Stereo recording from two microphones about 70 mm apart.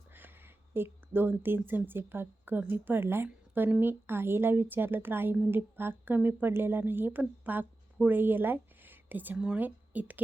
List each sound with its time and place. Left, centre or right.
0.1 s a woman's voice: right